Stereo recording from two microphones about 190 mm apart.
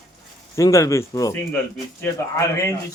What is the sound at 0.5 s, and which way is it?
Speech, 15° left (ahead or behind).